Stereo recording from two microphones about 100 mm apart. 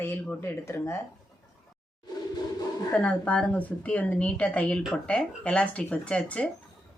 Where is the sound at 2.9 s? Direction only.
15° left (ahead or behind).